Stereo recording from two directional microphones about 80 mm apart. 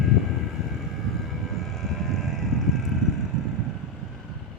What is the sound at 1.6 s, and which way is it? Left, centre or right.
Vehicle, centre.